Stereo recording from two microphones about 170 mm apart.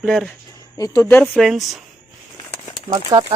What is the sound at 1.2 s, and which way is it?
Speech, centre (ahead or behind).